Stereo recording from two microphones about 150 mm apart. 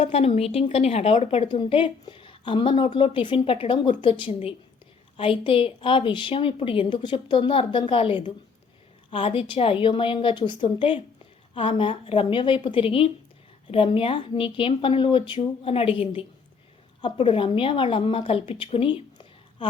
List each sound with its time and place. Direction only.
0.0 s a woman's voice: 40° left (ahead or behind)